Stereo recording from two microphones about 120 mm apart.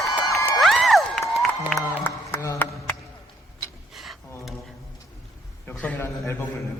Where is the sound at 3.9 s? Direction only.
Centre (ahead or behind).